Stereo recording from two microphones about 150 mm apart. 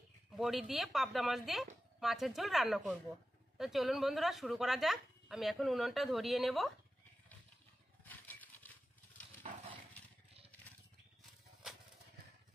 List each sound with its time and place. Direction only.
0.4 s speech: centre (ahead or behind)
8.1 s a sound: 10° left (ahead or behind)
9.5 s dog: 50° right (ahead or behind)